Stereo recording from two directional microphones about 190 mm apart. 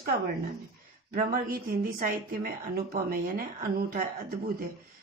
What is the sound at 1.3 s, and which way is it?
Speech, 50° right (ahead or behind).